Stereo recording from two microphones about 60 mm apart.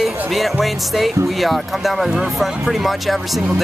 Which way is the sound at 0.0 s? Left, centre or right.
Centre.